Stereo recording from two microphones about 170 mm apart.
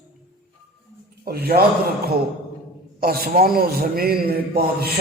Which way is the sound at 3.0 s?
60° right (ahead or behind).